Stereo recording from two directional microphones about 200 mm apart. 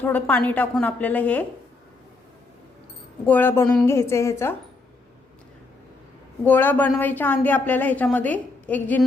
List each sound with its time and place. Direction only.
0.0 s a woman's voice: 10° left (ahead or behind)
3.2 s a woman's voice: 10° left (ahead or behind)
6.4 s a woman's voice: 10° left (ahead or behind)